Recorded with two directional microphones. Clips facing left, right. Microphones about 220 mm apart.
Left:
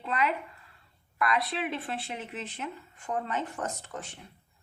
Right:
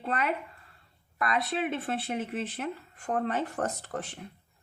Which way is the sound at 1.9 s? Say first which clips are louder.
Right 5 dB; 45° right (ahead or behind).